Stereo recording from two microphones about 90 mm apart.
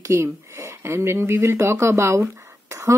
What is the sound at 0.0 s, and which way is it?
Speech, 35° right (ahead or behind).